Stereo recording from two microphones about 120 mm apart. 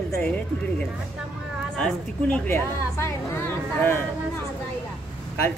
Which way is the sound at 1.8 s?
10° left (ahead or behind).